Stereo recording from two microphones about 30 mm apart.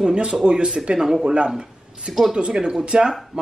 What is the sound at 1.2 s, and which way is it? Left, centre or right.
Speech, right.